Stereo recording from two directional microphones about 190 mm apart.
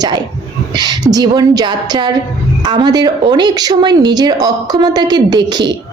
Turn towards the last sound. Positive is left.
turn(degrees=-20)  # may be behind; listen again after turning